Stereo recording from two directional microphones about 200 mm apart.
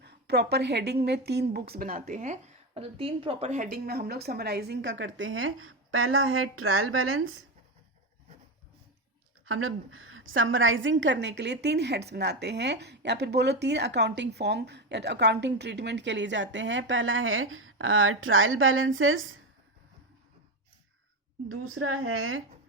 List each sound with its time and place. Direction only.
0.0 s a woman's voice: 55° right (ahead or behind); by 3.7 s 35° right (ahead or behind)
3.7 s a woman's voice: 50° right (ahead or behind); by 7.4 s 90° right
9.5 s a woman's voice: 90° right
21.5 s a woman's voice: 90° right